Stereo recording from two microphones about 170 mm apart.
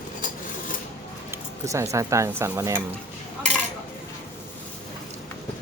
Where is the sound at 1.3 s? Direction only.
15° right (ahead or behind).